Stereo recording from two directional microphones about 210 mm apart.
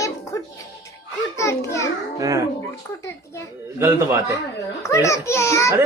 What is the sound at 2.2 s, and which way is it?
Speech, 15° right (ahead or behind).